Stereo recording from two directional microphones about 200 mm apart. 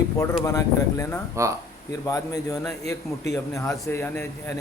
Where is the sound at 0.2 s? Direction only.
15° left (ahead or behind).